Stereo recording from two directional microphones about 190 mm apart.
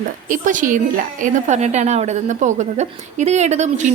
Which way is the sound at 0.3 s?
45° right (ahead or behind).